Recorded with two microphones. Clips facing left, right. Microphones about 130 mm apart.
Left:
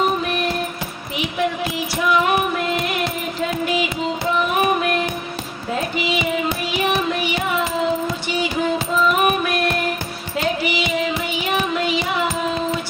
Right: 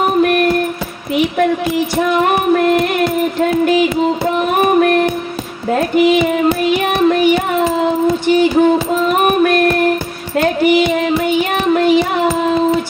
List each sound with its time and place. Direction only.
0.0 s a sound: 60° right (ahead or behind)
2.0 s music: 50° right (ahead or behind)
5.7 s child singing: 55° right (ahead or behind)
8.3 s music: 50° right (ahead or behind)
10.3 s child singing: 50° right (ahead or behind)